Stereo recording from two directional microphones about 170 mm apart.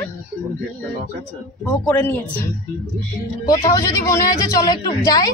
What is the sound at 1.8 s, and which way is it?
Speech, 15° left (ahead or behind).